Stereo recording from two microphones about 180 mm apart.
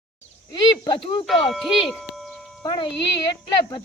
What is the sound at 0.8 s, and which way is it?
Speech, 25° left (ahead or behind).